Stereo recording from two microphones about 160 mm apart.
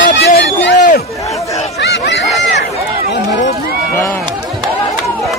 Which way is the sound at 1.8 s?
90° left.